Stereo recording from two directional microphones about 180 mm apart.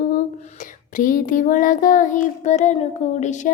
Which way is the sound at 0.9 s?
50° left (ahead or behind).